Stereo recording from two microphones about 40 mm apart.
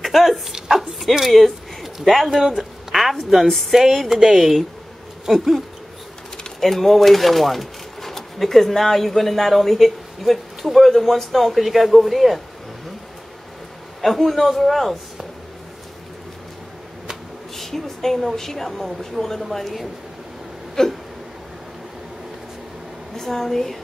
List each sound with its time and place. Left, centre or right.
0.0 s speech: centre
0.6 s dog: centre
1.3 s speech: centre
6.6 s speech: centre
14.0 s speech: centre
17.6 s a woman's voice: centre
23.1 s a woman's voice: centre